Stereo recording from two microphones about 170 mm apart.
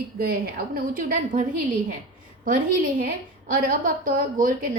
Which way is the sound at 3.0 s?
55° right (ahead or behind).